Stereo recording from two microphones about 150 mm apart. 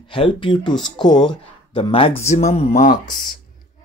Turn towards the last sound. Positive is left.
turn(degrees=65)  # may be behind; listen again after turning